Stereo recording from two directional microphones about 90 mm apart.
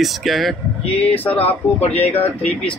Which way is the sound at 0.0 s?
Centre (ahead or behind).